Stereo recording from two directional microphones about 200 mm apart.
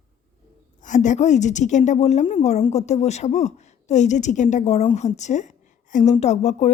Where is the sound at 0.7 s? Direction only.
40° left (ahead or behind).